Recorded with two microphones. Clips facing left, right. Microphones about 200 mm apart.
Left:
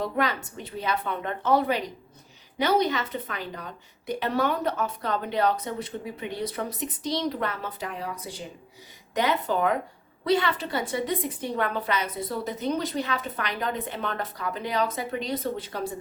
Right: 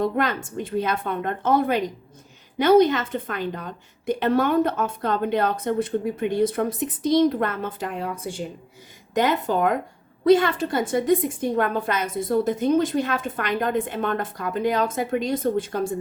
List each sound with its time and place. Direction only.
0.0 s a woman's voice: 50° right (ahead or behind)